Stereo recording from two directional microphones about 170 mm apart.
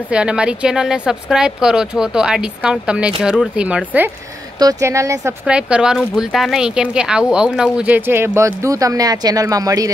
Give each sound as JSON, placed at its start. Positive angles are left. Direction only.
{"t": 0.1, "sound": "speech", "side_deg": -5}
{"t": 4.6, "sound": "speech", "side_deg": -20}
{"t": 5.4, "sound": "speech", "side_deg": -5}